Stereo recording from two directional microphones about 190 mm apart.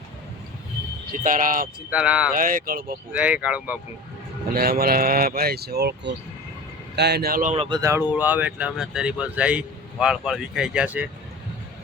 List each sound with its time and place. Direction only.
1.2 s speech: 45° right (ahead or behind)
1.9 s speech: 5° right (ahead or behind)
2.3 s speech: 45° right (ahead or behind)
3.1 s speech: 5° right (ahead or behind)
4.5 s speech: 50° right (ahead or behind)
7.5 s speech: 30° right (ahead or behind)
7.8 s speech: 15° right (ahead or behind)